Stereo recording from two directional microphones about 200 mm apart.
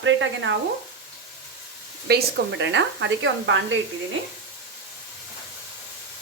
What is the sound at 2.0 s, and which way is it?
Speech, 60° right (ahead or behind).